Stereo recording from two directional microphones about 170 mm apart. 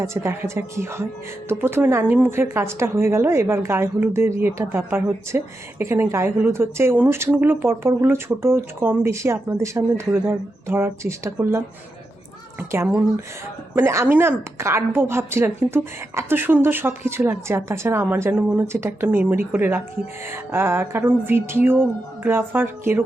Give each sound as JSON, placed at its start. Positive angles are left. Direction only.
{"t": 0.0, "sound": "a woman's voice", "side_deg": -15}